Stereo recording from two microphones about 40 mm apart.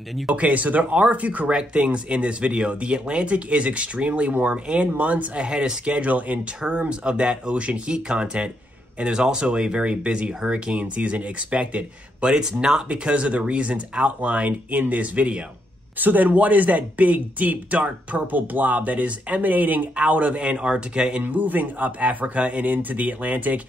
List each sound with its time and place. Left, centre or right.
0.4 s speech: right
1.5 s speech: right
5.4 s speech: right
5.9 s speech: right
6.8 s speech: right
10.8 s speech: right
12.2 s speech: right
12.9 s speech: right
16.0 s speech: right
19.5 s speech: right
20.0 s speech: right
21.2 s speech: right